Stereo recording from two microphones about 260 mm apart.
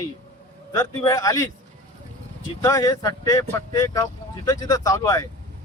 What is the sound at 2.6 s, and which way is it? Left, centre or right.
Speech, centre.